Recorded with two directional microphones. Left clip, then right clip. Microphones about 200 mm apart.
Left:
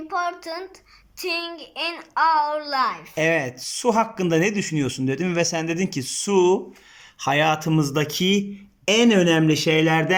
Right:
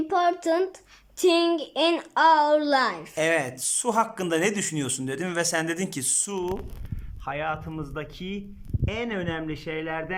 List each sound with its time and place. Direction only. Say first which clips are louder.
0.1 s a child's voice: right 3 dB; 30° right (ahead or behind)
3.2 s speech: left 3 dB; 5° left (ahead or behind)